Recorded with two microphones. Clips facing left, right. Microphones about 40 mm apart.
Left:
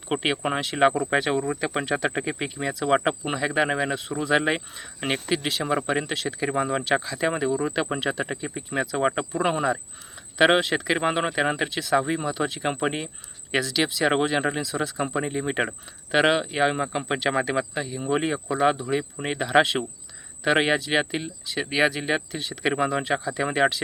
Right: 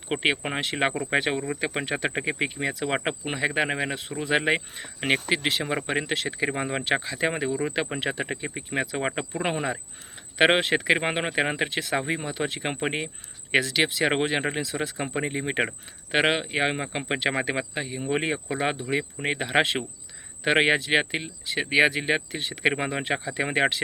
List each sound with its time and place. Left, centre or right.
0.4 s speech: centre
10.3 s speech: right